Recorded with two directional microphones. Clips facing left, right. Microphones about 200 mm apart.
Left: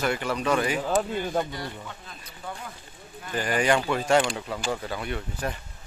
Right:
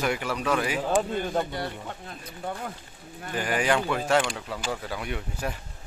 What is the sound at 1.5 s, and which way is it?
Speech, 60° right (ahead or behind).